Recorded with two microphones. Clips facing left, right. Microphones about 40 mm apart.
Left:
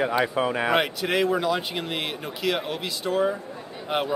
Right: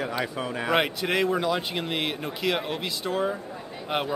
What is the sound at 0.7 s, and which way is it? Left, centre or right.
Speech, centre.